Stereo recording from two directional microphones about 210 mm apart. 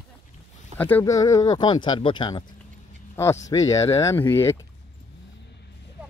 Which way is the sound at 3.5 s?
15° left (ahead or behind).